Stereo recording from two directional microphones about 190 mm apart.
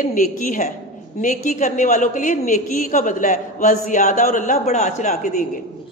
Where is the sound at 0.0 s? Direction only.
45° left (ahead or behind).